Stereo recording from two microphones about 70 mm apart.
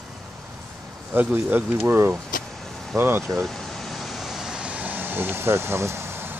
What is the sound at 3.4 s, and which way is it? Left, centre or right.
Vehicle, centre.